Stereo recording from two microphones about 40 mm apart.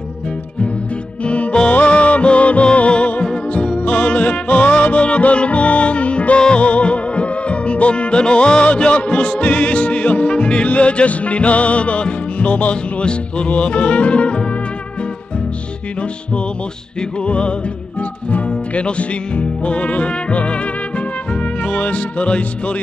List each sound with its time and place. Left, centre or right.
1.2 s music: left
17.3 s music: left
21.6 s music: left